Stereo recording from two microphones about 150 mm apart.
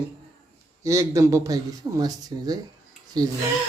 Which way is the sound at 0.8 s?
20° right (ahead or behind).